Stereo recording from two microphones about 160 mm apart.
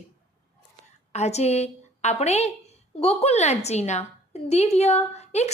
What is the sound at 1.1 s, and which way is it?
A woman's voice, 45° left (ahead or behind).